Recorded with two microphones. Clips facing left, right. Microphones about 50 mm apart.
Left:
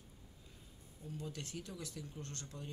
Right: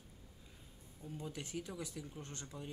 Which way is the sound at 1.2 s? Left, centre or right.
Centre.